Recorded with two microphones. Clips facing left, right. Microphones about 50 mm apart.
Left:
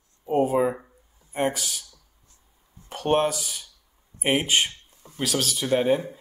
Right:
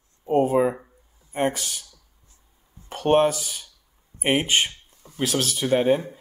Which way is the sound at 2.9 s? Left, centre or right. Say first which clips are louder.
Right 4 dB; centre.